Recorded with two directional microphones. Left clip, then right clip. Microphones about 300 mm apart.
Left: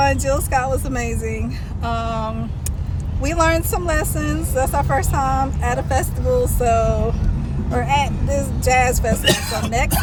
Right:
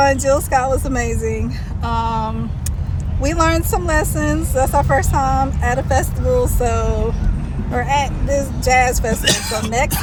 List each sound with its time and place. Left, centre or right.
0.0 s speech: centre
9.2 s speech: left
9.6 s speech: centre